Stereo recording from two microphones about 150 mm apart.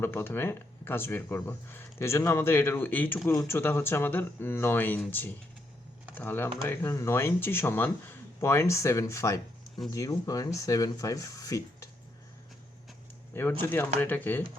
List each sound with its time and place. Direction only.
0.0 s speech: 15° left (ahead or behind)
13.3 s speech: 15° left (ahead or behind)